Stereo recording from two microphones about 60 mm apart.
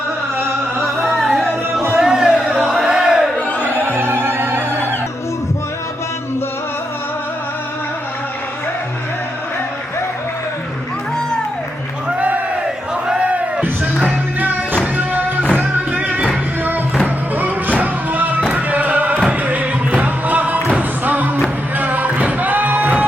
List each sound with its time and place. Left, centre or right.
0.8 s music: centre
2.0 s a sound: centre
3.8 s music: right
12.0 s a sound: right
14.3 s music: right
17.3 s music: right